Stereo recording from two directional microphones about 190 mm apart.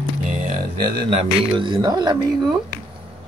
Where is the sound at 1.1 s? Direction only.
25° right (ahead or behind).